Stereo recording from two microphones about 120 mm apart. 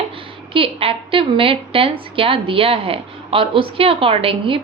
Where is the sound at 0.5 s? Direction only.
50° right (ahead or behind).